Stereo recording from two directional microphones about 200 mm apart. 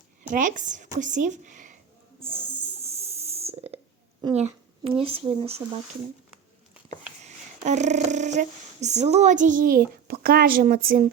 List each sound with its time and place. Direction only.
0.3 s a woman's voice: 40° right (ahead or behind)
2.8 s a sound: 30° right (ahead or behind)
4.4 s speech: 30° right (ahead or behind)
6.8 s speech: 35° right (ahead or behind)